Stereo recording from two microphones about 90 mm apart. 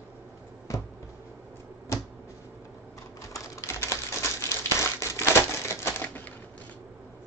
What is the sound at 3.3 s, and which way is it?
Typewriter, 30° left (ahead or behind).